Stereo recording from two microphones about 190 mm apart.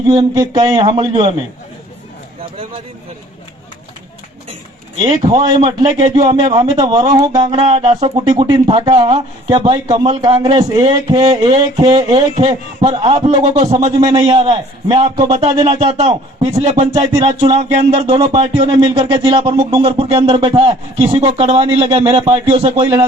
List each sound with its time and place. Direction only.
0.1 s a man's voice: 20° right (ahead or behind)
5.0 s a man's voice: 20° right (ahead or behind)
13.6 s speech: 35° right (ahead or behind)
14.0 s a man's voice: 20° right (ahead or behind)